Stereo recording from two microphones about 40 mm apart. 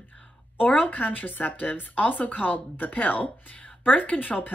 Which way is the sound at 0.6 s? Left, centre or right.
Left.